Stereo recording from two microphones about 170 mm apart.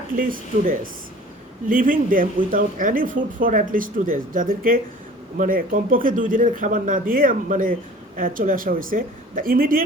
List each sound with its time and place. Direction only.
0.2 s a man's voice: 55° right (ahead or behind)